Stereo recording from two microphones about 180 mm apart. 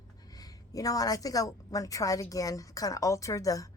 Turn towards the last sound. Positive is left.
turn(degrees=20)  # may be behind; listen again after turning